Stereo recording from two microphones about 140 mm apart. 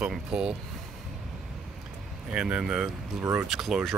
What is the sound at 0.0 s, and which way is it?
Speech, 5° right (ahead or behind).